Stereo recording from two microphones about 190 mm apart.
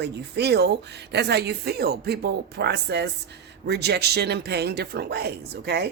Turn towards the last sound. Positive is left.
turn(degrees=-60)  # may be behind; listen again after turning